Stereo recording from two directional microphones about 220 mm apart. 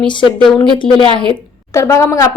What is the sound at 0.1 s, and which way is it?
A woman's voice, 20° left (ahead or behind).